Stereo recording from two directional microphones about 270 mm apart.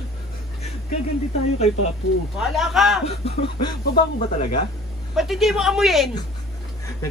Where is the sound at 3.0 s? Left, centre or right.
Left.